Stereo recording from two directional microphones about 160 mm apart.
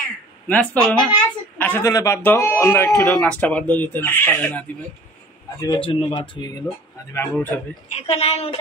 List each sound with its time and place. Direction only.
0.5 s a man's voice: 5° left (ahead or behind)
5.6 s a man's voice: 25° left (ahead or behind)
7.1 s speech: 10° left (ahead or behind)
7.9 s a woman's voice: 40° left (ahead or behind)